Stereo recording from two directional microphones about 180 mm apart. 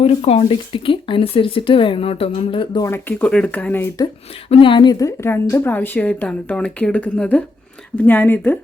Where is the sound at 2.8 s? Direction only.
10° left (ahead or behind).